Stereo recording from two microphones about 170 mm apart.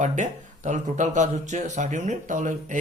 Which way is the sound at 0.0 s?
45° right (ahead or behind).